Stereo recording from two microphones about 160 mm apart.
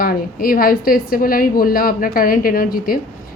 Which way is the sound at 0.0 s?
65° left (ahead or behind).